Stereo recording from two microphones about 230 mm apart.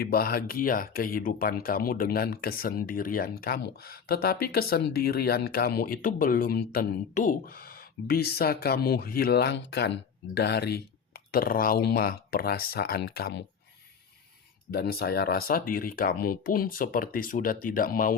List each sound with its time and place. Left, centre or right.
0.0 s speech: left
14.7 s speech: left